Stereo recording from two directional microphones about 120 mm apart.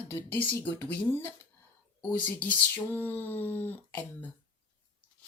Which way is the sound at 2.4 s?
15° left (ahead or behind).